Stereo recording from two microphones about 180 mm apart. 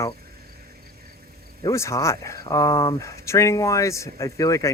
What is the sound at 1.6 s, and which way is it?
Speech, 15° left (ahead or behind).